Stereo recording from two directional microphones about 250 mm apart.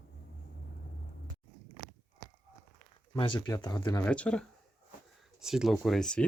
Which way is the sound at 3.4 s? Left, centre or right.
Centre.